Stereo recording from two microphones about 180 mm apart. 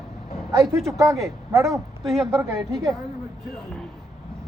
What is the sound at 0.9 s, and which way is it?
Speech, 15° right (ahead or behind).